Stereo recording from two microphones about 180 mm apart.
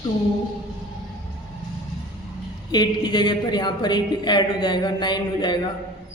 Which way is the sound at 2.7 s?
25° left (ahead or behind).